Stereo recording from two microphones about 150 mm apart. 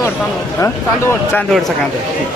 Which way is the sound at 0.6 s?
15° left (ahead or behind).